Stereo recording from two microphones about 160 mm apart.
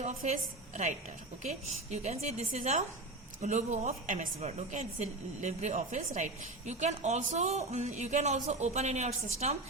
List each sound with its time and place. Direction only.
0.0 s a woman's voice: 50° right (ahead or behind)